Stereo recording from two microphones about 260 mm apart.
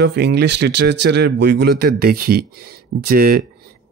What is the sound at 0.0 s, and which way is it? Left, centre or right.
Speech, right.